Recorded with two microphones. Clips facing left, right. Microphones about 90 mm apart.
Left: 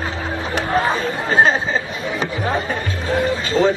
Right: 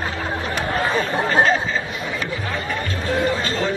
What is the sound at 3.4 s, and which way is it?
Speech, 25° left (ahead or behind).